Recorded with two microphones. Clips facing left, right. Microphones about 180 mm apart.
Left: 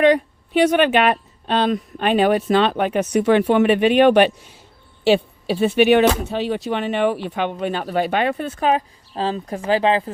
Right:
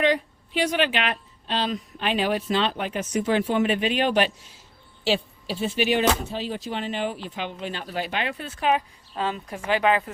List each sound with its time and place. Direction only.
0.0 s speech: 55° left (ahead or behind); by 10.0 s 30° left (ahead or behind)